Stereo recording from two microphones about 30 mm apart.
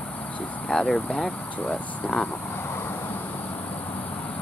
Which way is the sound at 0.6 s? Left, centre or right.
Centre.